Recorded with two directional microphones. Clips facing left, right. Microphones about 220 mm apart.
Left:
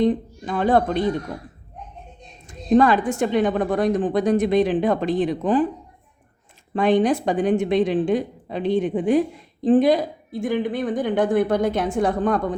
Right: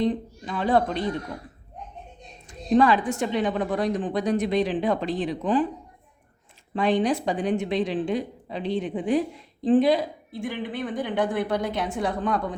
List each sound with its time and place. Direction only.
0.0 s a woman's voice: 50° left (ahead or behind)
2.5 s a woman's voice: 45° left (ahead or behind)
6.7 s a woman's voice: 50° left (ahead or behind)